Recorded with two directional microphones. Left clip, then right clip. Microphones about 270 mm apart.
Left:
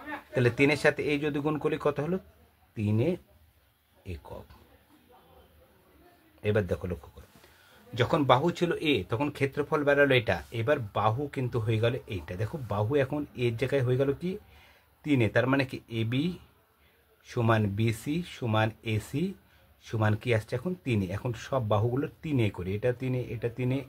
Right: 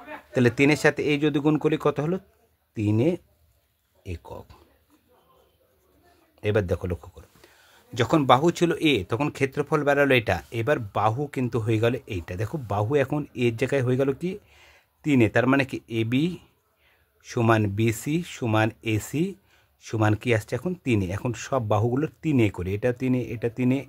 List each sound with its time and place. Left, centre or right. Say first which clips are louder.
0.3 s speech: right 4 dB; right
6.4 s speech: right 4 dB; right